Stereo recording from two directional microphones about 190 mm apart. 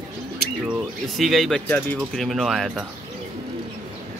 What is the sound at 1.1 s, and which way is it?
Speech, centre (ahead or behind).